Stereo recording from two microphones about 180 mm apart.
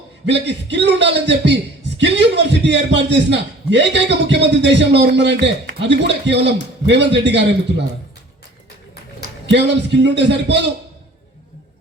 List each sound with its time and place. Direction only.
0.3 s a man's voice: 75° right (ahead or behind)
9.5 s a man's voice: 75° right (ahead or behind)